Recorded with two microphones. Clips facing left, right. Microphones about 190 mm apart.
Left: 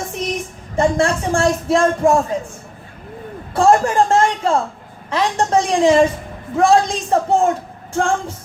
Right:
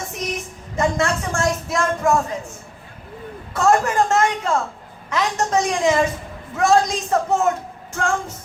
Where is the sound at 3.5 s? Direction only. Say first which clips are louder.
Left 4 dB; 30° left (ahead or behind).